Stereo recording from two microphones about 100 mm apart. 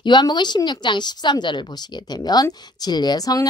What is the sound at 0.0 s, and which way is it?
Speech, 50° left (ahead or behind).